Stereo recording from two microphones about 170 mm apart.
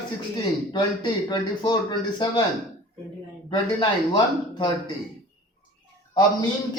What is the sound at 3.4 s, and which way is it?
Speech, 25° left (ahead or behind).